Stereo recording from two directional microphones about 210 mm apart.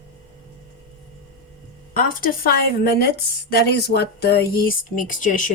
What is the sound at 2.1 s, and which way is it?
Speech, 45° left (ahead or behind).